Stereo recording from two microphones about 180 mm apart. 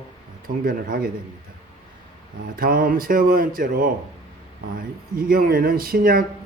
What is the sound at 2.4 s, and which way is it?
Speech, 55° right (ahead or behind).